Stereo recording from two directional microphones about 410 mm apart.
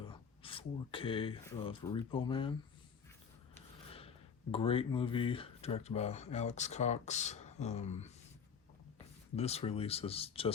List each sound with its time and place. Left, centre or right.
0.0 s speech: centre
3.5 s a sound: centre
4.5 s speech: centre
9.3 s speech: centre